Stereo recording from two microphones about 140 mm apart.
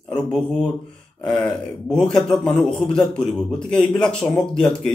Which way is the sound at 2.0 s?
5° left (ahead or behind).